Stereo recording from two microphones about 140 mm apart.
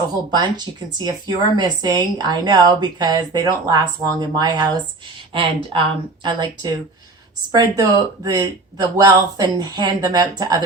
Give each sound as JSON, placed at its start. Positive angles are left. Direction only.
{"t": 0.3, "sound": "a woman's voice", "side_deg": -30}